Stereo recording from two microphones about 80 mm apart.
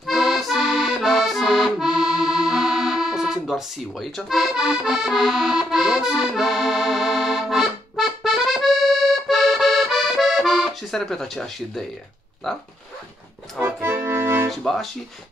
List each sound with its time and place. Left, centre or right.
0.0 s accordion: centre
12.4 s speech: centre
13.6 s accordion: right
14.5 s speech: centre